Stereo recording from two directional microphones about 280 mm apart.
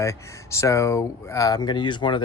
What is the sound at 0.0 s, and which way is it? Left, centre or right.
Speech, centre.